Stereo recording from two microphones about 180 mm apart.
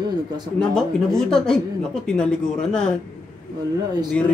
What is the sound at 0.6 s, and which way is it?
A woman's voice, 5° left (ahead or behind).